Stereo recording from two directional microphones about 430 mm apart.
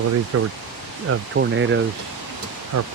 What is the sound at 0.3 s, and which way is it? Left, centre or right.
Speech, right.